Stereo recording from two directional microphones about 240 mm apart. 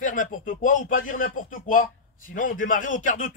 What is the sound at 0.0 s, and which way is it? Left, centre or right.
Speech, left.